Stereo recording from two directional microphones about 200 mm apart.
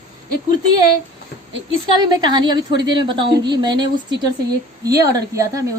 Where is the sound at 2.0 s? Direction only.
20° right (ahead or behind).